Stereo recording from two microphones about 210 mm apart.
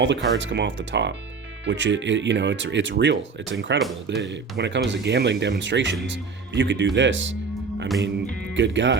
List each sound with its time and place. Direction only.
0.0 s speech: 60° right (ahead or behind)
8.5 s speech: 60° right (ahead or behind)